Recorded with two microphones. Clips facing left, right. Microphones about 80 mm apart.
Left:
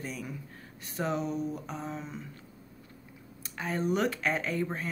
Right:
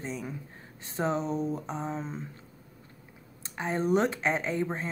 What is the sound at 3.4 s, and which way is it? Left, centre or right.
A woman's voice, right.